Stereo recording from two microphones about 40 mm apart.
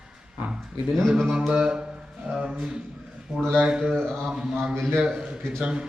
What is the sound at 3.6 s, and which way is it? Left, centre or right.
Speech, right.